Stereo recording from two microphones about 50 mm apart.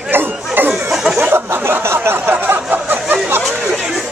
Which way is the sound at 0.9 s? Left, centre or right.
Centre.